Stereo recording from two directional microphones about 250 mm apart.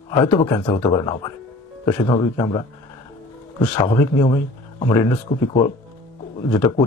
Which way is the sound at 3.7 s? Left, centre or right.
Centre.